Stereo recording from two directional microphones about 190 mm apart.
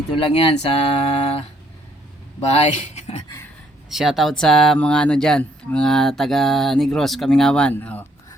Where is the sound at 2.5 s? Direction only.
35° left (ahead or behind).